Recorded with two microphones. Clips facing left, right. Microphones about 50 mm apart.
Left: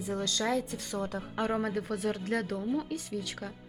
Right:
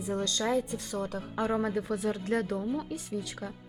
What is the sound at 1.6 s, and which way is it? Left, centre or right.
Speech, right.